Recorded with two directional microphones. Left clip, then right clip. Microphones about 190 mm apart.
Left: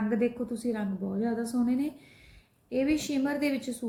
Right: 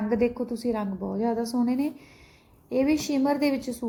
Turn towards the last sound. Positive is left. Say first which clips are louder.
# right 4 dB
turn(degrees=-15)  # may be behind; listen again after turning